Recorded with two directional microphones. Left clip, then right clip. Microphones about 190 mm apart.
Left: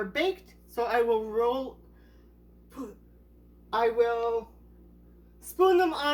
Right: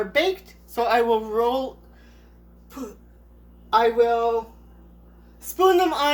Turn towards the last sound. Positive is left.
turn(degrees=-15)  # may be behind; listen again after turning